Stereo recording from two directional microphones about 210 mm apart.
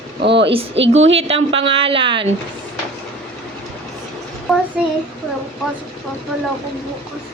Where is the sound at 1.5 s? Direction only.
25° right (ahead or behind).